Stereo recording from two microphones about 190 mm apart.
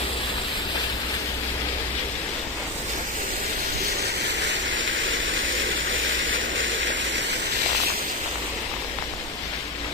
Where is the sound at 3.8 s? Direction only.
60° right (ahead or behind).